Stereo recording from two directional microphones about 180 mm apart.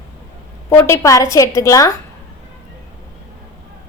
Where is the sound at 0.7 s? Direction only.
15° left (ahead or behind).